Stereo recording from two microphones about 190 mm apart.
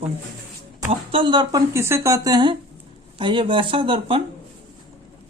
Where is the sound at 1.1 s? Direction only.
25° right (ahead or behind).